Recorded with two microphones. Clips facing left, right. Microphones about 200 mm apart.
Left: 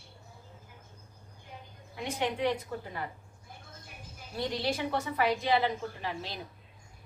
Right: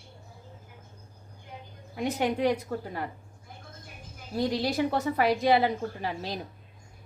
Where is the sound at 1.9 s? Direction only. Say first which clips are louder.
Right 5 dB; 40° right (ahead or behind).